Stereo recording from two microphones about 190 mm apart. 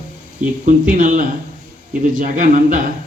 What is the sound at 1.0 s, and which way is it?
A man's voice, 40° right (ahead or behind).